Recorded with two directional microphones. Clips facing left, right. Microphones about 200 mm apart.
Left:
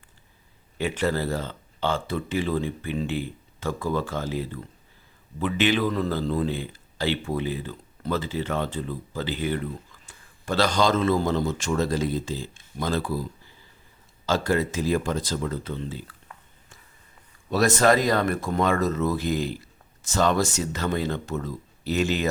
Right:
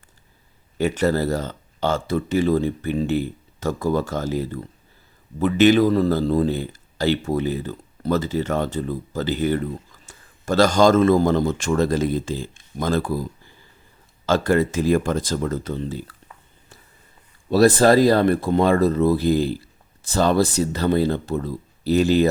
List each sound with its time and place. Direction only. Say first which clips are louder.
0.8 s speech: right 5 dB; 45° right (ahead or behind)
14.3 s speech: right 5 dB; 50° right (ahead or behind)
17.5 s speech: right 6 dB; 35° right (ahead or behind)